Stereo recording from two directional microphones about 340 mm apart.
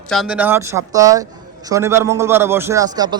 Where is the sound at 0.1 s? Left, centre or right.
Centre.